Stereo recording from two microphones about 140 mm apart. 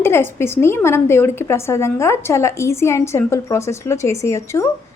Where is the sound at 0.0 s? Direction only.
15° left (ahead or behind).